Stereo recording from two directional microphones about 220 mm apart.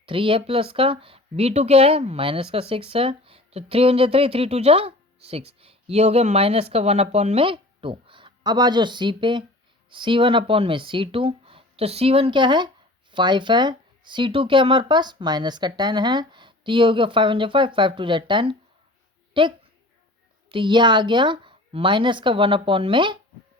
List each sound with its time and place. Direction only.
0.0 s speech: 25° right (ahead or behind)